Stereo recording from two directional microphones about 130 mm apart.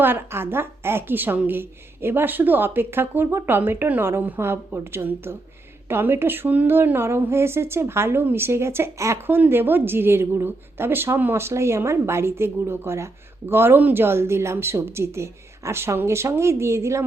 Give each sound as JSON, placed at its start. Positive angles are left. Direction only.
{"t": 0.0, "sound": "a woman's voice", "side_deg": -15}